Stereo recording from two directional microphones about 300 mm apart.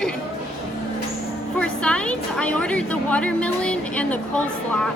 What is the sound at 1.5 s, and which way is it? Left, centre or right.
A woman's voice, centre.